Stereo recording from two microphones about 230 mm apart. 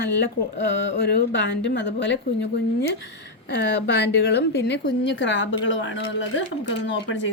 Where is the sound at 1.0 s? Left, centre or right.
Left.